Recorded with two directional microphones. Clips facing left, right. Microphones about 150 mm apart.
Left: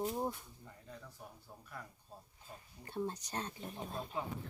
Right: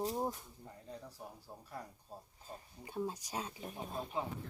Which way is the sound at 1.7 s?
30° right (ahead or behind).